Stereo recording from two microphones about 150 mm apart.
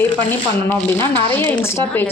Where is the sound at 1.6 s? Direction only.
15° left (ahead or behind).